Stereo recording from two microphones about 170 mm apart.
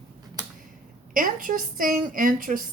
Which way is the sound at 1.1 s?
55° right (ahead or behind).